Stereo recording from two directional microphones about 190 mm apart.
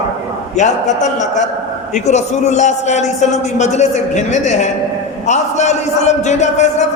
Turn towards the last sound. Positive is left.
turn(degrees=40)  # may be behind; listen again after turning